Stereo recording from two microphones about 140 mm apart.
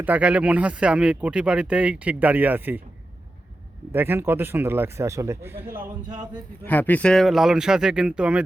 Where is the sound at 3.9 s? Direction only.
15° right (ahead or behind).